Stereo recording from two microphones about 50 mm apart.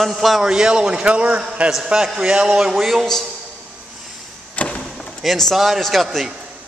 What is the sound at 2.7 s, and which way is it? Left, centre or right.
Speech, centre.